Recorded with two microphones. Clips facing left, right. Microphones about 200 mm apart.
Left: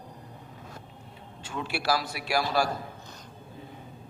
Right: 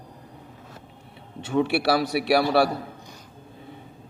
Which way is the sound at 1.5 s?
65° right (ahead or behind).